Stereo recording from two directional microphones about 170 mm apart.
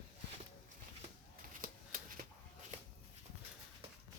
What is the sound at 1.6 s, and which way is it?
Shuffling cards, 55° right (ahead or behind).